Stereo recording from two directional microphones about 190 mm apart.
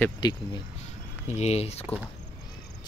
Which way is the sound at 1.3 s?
35° left (ahead or behind).